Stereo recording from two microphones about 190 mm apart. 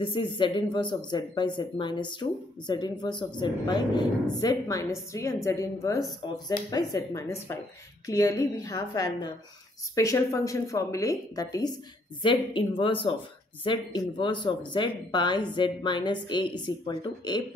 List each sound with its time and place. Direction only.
0.0 s a woman's voice: 25° left (ahead or behind)